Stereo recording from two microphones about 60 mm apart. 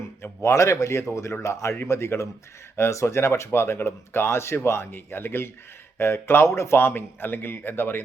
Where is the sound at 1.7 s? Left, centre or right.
Left.